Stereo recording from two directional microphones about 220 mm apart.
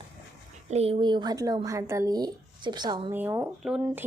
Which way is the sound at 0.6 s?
30° right (ahead or behind).